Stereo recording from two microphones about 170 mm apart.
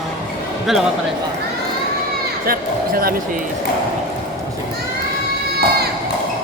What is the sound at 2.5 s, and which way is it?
Speech, 60° right (ahead or behind).